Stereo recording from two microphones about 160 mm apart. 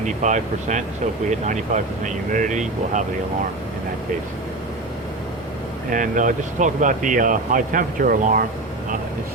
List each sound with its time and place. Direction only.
0.0 s speech: 50° right (ahead or behind)
5.9 s speech: 55° right (ahead or behind)